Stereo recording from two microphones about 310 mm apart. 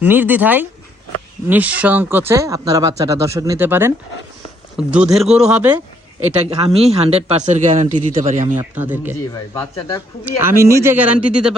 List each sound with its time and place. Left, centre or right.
0.0 s speech: centre
6.7 s speech: centre
8.5 s speech: centre
9.3 s speech: centre
10.2 s speech: centre